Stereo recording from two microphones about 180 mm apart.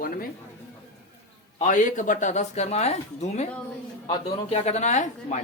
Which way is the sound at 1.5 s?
45° left (ahead or behind).